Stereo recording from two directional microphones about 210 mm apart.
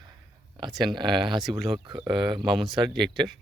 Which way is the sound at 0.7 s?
Centre (ahead or behind).